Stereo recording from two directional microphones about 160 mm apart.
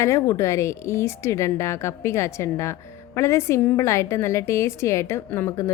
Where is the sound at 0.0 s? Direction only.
20° left (ahead or behind).